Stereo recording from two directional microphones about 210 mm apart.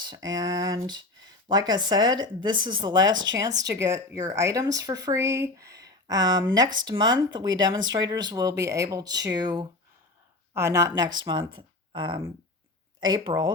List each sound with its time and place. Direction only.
0.0 s speech: 20° right (ahead or behind)